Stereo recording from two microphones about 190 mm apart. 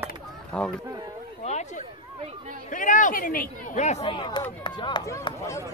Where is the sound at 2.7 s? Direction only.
40° left (ahead or behind); by 5.6 s 15° left (ahead or behind).